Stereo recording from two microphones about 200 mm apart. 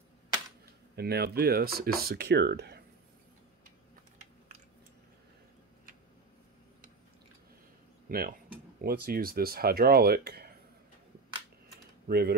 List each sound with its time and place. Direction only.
0.9 s speech: 55° right (ahead or behind)
8.1 s cutlery: 50° right (ahead or behind)
8.8 s speech: 45° right (ahead or behind)
12.1 s speech: 50° right (ahead or behind)